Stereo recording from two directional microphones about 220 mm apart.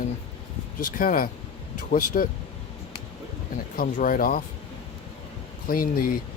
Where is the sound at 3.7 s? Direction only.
40° left (ahead or behind).